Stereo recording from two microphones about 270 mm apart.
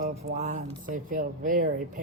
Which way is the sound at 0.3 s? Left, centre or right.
Right.